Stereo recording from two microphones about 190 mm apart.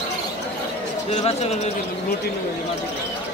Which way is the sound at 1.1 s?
35° left (ahead or behind).